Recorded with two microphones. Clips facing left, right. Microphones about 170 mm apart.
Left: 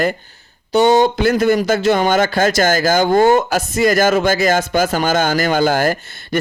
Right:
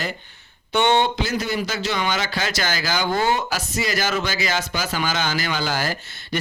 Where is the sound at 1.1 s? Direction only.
55° left (ahead or behind).